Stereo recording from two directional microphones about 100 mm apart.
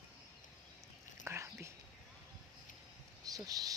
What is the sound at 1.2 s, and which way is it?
Speech, 30° right (ahead or behind).